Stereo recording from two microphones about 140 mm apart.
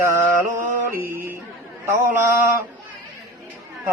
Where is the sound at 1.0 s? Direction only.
90° right.